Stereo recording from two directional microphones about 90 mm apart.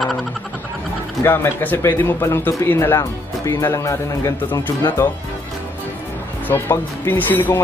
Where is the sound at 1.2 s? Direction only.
25° left (ahead or behind).